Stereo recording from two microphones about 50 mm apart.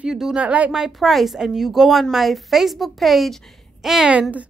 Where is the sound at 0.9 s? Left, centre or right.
Centre.